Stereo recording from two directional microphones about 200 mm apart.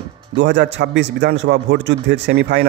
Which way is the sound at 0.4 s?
60° right (ahead or behind).